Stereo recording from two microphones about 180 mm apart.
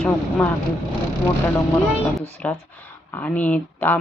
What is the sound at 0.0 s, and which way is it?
Speech, 5° left (ahead or behind).